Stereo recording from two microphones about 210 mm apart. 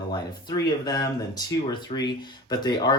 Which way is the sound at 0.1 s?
20° left (ahead or behind).